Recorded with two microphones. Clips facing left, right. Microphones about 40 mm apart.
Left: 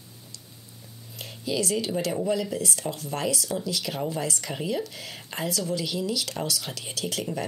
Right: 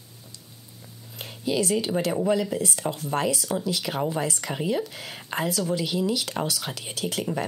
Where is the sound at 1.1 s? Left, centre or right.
Right.